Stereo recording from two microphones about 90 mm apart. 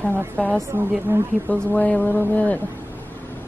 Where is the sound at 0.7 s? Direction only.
30° right (ahead or behind).